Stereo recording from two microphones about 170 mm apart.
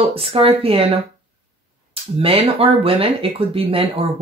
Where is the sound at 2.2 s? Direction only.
35° right (ahead or behind).